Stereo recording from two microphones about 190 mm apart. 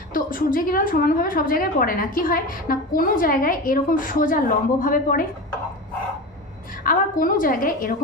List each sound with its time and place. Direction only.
0.1 s a woman's voice: 45° left (ahead or behind)
6.8 s a woman's voice: 50° left (ahead or behind)